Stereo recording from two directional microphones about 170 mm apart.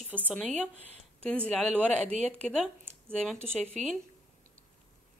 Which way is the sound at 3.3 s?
15° right (ahead or behind).